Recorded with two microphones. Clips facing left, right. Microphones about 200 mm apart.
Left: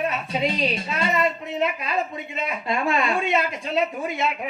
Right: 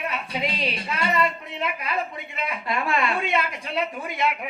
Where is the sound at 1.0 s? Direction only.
20° left (ahead or behind).